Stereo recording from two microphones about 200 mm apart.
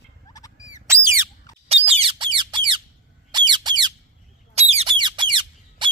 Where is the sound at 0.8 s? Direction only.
10° right (ahead or behind).